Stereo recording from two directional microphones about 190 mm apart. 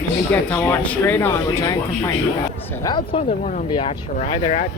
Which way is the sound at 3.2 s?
40° left (ahead or behind).